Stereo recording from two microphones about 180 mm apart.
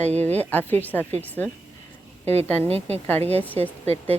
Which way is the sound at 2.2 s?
35° right (ahead or behind).